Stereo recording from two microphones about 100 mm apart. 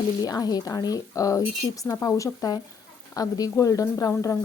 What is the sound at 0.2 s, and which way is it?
Speech, 40° left (ahead or behind).